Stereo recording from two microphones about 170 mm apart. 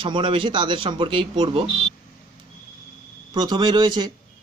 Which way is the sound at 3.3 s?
25° right (ahead or behind).